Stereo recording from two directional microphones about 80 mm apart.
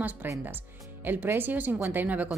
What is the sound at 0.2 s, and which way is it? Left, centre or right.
Speech, right.